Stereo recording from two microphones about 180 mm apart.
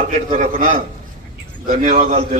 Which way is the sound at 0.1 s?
45° right (ahead or behind).